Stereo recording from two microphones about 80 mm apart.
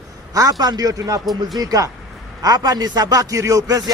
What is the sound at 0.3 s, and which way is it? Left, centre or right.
Speech, right.